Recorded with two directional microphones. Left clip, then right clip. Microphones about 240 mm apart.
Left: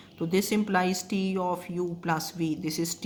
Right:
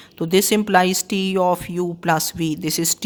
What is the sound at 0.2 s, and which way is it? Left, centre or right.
Speech, right.